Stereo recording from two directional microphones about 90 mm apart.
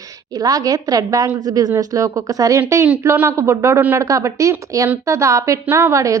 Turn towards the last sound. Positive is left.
turn(degrees=-35)  # may be behind; listen again after turning